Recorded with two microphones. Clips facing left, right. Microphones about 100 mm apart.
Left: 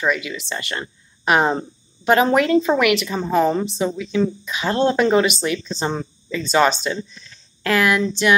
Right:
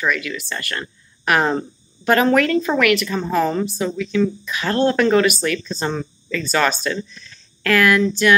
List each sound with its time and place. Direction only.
0.0 s speech: 20° left (ahead or behind)